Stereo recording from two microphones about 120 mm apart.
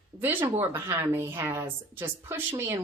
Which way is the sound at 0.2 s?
15° right (ahead or behind).